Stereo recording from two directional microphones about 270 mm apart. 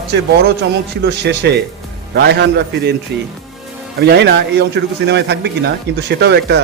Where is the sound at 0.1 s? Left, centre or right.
Right.